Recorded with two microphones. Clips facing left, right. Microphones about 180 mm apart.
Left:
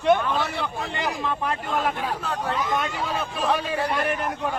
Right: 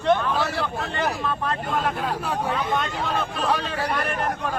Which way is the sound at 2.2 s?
10° right (ahead or behind).